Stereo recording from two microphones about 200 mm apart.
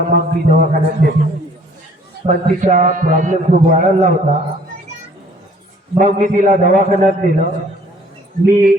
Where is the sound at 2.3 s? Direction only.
40° right (ahead or behind).